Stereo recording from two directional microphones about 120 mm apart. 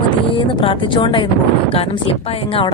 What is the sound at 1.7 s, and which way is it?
Speech, 55° left (ahead or behind).